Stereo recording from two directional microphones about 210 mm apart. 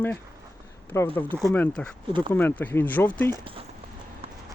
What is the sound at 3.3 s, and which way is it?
Speech, 25° right (ahead or behind).